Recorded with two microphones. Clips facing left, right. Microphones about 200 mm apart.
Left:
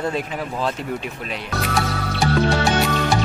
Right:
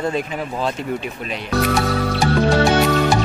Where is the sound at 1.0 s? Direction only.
Centre (ahead or behind).